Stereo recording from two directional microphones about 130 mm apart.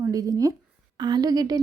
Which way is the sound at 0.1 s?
25° right (ahead or behind).